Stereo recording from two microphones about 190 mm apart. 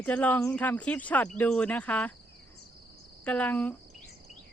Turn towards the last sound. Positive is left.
turn(degrees=10)  # may be behind; listen again after turning